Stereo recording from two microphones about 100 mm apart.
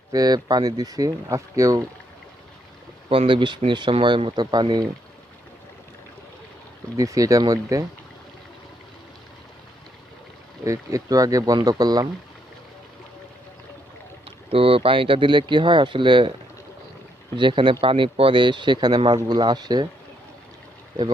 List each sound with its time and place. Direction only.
0.1 s speech: 40° right (ahead or behind)
3.1 s speech: 60° right (ahead or behind); by 4.9 s 45° right (ahead or behind)
6.9 s speech: 35° right (ahead or behind)
10.6 s speech: 35° right (ahead or behind)
14.3 s speech: 70° right (ahead or behind); by 16.3 s 55° right (ahead or behind)
17.3 s speech: 55° right (ahead or behind)